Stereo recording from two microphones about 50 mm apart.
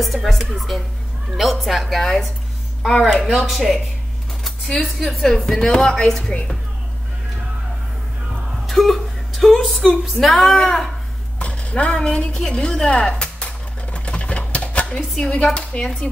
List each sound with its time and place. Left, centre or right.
0.0 s a woman's voice: centre
4.8 s a woman's voice: centre
8.6 s a sound: centre
10.2 s a woman's voice: centre
11.3 s a woman's voice: left
13.9 s a sound: left
14.9 s speech: centre